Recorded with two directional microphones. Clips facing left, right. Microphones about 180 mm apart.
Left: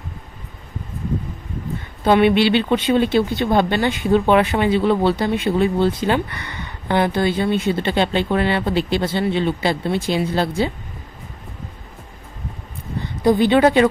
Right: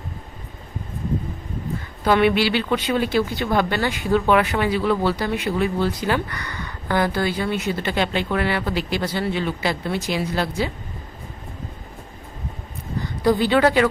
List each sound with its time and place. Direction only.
2.0 s speech: 20° left (ahead or behind)
13.0 s a woman's voice: 20° left (ahead or behind)